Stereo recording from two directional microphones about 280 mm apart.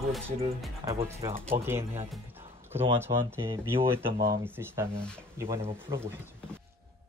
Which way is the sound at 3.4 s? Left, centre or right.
Centre.